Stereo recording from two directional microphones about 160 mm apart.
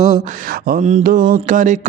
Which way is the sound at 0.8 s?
45° right (ahead or behind).